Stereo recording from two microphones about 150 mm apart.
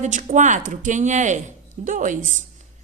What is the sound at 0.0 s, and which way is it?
A woman's voice, 55° right (ahead or behind).